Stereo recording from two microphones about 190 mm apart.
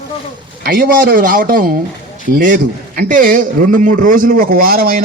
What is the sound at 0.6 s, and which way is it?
A man's voice, 50° right (ahead or behind).